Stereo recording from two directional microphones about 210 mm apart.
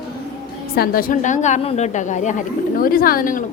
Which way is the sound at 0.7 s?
45° left (ahead or behind).